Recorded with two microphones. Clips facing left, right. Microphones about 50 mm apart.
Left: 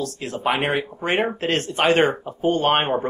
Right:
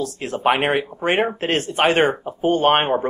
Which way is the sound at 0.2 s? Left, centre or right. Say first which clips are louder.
Right 4 dB; right.